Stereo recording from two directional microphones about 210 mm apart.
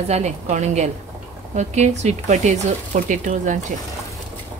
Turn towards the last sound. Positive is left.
turn(degrees=-35)  # may be behind; listen again after turning